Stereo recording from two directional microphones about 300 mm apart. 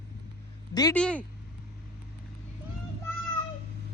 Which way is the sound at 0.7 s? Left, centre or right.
Centre.